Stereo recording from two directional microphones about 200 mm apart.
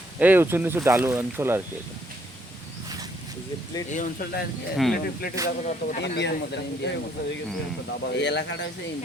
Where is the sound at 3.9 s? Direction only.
40° left (ahead or behind).